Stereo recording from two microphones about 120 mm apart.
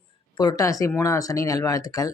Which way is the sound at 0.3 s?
35° left (ahead or behind).